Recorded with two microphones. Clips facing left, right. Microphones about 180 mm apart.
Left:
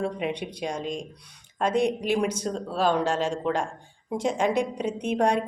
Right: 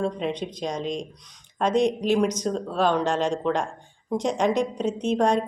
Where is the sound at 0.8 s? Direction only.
50° left (ahead or behind).